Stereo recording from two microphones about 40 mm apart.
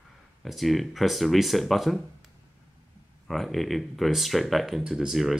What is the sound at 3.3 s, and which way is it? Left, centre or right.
Speech, centre.